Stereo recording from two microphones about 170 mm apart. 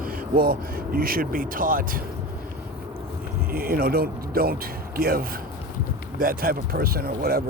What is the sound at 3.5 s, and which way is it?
Speech, 60° right (ahead or behind).